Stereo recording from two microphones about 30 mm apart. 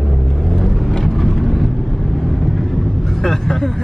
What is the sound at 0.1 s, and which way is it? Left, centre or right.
Vehicle, centre.